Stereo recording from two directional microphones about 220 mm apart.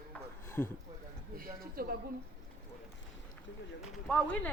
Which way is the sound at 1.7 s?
40° right (ahead or behind).